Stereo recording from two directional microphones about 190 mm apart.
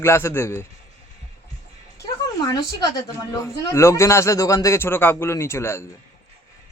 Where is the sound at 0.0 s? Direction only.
15° left (ahead or behind).